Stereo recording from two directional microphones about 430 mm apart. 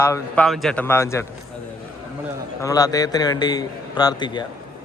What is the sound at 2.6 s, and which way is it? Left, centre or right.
Speech, centre.